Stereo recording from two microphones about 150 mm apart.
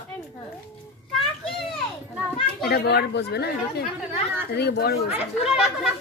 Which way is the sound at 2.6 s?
90° left.